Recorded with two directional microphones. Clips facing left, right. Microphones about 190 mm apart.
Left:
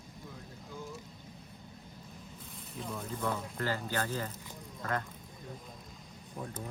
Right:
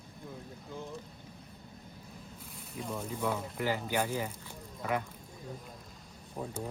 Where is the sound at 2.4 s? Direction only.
Centre (ahead or behind).